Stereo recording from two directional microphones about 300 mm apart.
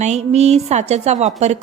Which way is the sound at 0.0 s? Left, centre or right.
Right.